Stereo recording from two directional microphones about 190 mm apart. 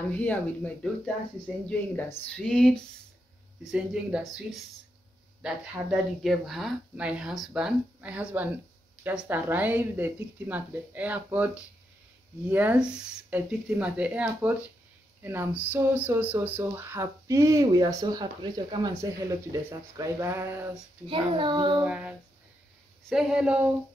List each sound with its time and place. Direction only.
0.1 s speech: 5° left (ahead or behind)
1.7 s speech: 5° left (ahead or behind); by 20.8 s 10° right (ahead or behind)
21.1 s a child's voice: 25° right (ahead or behind)
21.8 s speech: 5° right (ahead or behind)